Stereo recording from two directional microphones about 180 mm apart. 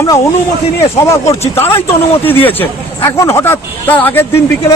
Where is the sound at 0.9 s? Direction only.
15° left (ahead or behind).